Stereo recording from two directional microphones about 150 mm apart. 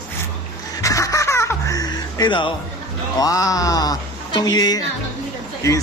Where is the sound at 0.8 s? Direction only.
20° left (ahead or behind).